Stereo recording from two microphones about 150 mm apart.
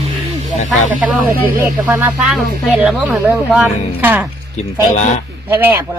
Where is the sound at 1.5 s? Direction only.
10° right (ahead or behind).